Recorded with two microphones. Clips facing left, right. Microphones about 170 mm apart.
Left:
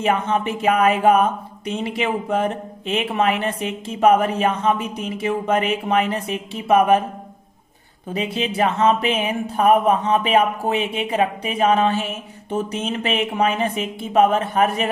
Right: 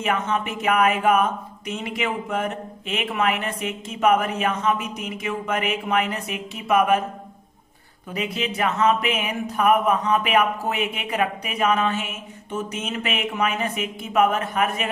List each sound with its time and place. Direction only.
0.0 s speech: 30° left (ahead or behind)
8.1 s speech: 30° left (ahead or behind)